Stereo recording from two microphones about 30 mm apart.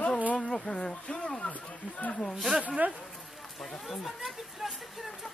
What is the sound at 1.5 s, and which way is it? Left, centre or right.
Speech, left.